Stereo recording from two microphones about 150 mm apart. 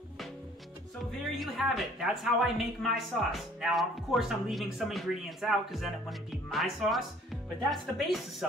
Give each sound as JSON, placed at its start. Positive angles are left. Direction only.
{"t": 1.4, "sound": "a woman's voice", "side_deg": 0}